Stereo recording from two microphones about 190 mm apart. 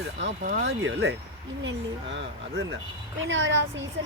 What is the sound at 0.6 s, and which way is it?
Speech, 70° right (ahead or behind).